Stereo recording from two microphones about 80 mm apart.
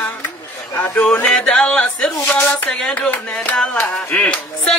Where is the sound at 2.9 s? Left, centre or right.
Centre.